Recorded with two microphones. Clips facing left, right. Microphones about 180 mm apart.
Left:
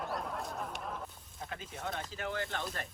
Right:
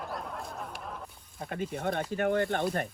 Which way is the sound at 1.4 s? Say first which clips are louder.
Right 9 dB; 55° right (ahead or behind).